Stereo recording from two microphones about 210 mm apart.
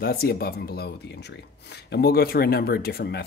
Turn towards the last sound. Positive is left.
turn(degrees=50)  # may be behind; listen again after turning